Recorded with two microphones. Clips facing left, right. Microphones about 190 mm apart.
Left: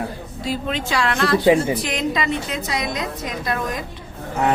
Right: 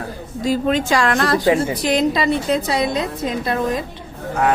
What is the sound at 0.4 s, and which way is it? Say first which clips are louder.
A woman's voice: right 7 dB; 45° right (ahead or behind).